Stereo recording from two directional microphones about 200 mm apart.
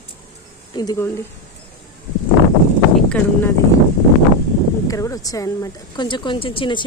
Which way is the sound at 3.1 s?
5° left (ahead or behind).